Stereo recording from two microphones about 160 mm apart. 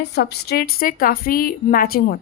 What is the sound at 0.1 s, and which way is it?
Speech, 90° left.